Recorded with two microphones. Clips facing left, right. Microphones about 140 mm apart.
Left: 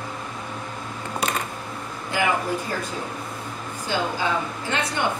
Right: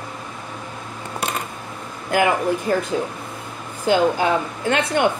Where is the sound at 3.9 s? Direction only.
60° right (ahead or behind).